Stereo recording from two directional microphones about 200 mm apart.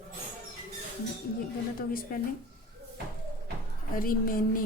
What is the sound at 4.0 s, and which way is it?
Speech, 45° left (ahead or behind).